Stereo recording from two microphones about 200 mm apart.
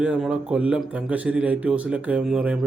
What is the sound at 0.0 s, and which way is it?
A man's voice, 5° right (ahead or behind).